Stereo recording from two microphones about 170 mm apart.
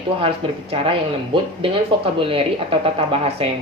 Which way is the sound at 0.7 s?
30° right (ahead or behind).